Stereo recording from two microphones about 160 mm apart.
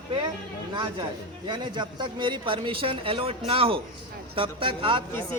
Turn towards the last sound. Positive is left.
turn(degrees=15)  # may be behind; listen again after turning